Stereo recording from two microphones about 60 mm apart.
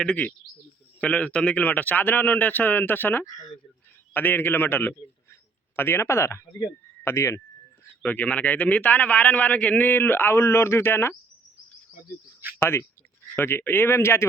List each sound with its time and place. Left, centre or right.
0.0 s a man's voice: left
5.3 s a sound: left
7.0 s speech: left
8.0 s a man's voice: left
12.5 s speech: left